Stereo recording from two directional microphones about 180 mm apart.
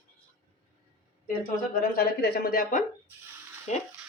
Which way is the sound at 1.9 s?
60° left (ahead or behind).